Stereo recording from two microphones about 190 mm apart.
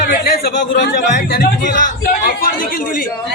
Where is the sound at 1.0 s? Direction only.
40° left (ahead or behind).